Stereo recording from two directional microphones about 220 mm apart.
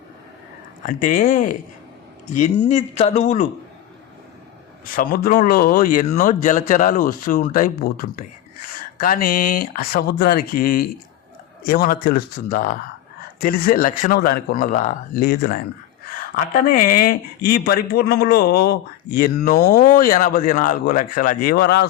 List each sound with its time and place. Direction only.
0.9 s speech: 40° left (ahead or behind)
4.9 s speech: 40° left (ahead or behind)